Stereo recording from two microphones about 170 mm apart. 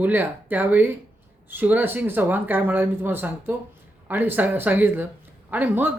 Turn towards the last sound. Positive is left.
turn(degrees=-10)  # may be behind; listen again after turning